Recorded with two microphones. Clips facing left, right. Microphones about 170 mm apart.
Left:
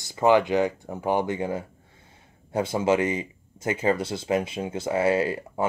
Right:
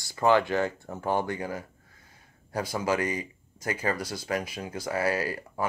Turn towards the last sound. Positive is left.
turn(degrees=25)  # may be behind; listen again after turning